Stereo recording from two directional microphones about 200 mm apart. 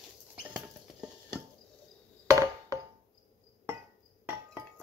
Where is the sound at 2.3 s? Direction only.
15° right (ahead or behind).